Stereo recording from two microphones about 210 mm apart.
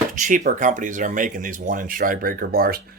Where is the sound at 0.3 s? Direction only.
40° right (ahead or behind).